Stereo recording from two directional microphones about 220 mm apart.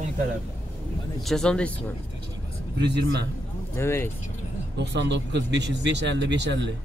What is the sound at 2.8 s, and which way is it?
Speech, 50° right (ahead or behind).